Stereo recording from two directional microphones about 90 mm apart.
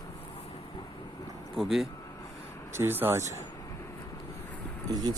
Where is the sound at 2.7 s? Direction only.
25° right (ahead or behind).